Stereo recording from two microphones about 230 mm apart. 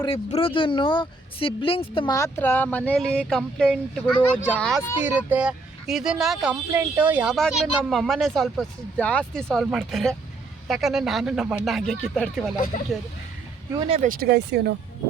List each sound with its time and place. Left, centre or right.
0.0 s speech: left; by 4.9 s centre
5.0 s speech: centre
12.5 s speech: left
13.9 s speech: right